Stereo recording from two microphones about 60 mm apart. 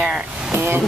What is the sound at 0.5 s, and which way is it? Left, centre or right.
Speech, right.